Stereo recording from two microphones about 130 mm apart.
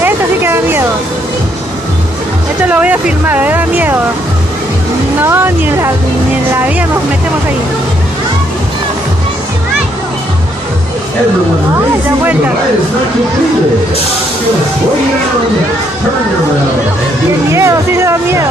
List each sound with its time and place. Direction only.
0.0 s a sound: 15° right (ahead or behind)
2.6 s speech: 10° right (ahead or behind)
5.2 s speech: 15° right (ahead or behind)
17.5 s speech: 20° right (ahead or behind)